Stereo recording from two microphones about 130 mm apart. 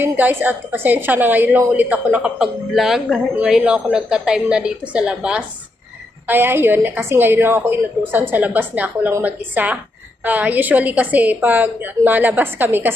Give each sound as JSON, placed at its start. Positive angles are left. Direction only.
{"t": 0.0, "sound": "a woman's voice", "side_deg": -15}